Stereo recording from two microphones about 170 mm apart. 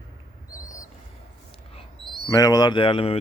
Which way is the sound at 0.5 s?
20° left (ahead or behind).